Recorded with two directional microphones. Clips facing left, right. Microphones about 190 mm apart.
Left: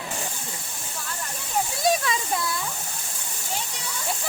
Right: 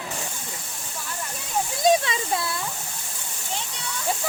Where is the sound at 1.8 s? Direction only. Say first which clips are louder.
Right 4 dB; 25° right (ahead or behind).